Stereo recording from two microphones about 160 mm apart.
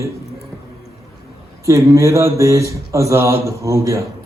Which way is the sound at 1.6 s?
20° right (ahead or behind).